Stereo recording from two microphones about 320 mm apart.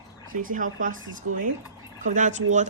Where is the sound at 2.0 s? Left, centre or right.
Right.